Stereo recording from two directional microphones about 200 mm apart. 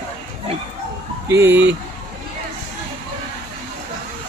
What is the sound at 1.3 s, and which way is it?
Speech, 10° right (ahead or behind).